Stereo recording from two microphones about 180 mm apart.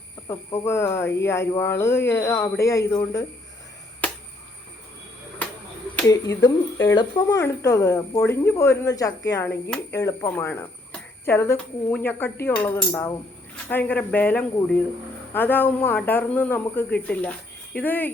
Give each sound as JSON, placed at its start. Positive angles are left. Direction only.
{"t": 0.3, "sound": "speech", "side_deg": 15}
{"t": 6.1, "sound": "speech", "side_deg": 20}